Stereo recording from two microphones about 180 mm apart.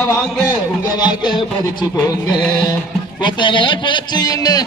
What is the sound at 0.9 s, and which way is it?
Music, 25° left (ahead or behind).